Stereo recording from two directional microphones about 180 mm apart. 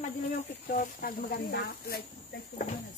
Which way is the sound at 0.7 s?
55° left (ahead or behind).